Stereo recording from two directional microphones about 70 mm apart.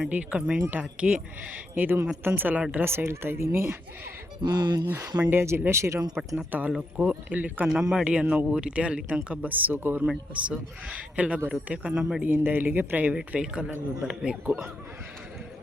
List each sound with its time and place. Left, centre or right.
0.1 s speech: centre
2.7 s speech: right
4.4 s speech: right
5.3 s speech: right
6.3 s speech: right
7.7 s speech: centre; by 10.1 s right
10.1 s speech: centre
12.2 s speech: right; by 14.7 s centre